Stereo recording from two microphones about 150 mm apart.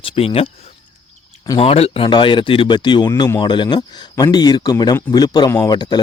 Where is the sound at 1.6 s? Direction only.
40° left (ahead or behind).